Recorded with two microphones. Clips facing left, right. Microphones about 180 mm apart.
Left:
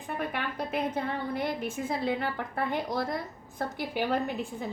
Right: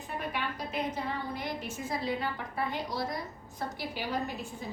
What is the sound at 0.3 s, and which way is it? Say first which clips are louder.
A woman's voice: left 2 dB; 55° left (ahead or behind).